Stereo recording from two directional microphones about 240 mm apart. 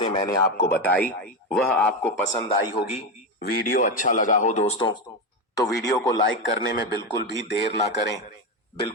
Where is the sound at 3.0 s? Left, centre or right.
Left.